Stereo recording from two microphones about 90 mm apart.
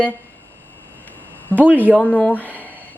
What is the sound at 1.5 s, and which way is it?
A woman's voice, 20° left (ahead or behind).